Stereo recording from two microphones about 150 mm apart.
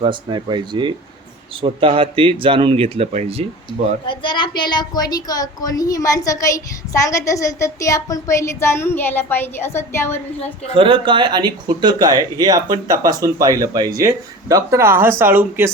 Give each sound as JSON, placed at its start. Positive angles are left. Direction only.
{"t": 0.0, "sound": "speech", "side_deg": -30}
{"t": 4.0, "sound": "a woman's voice", "side_deg": 35}
{"t": 10.8, "sound": "speech", "side_deg": -35}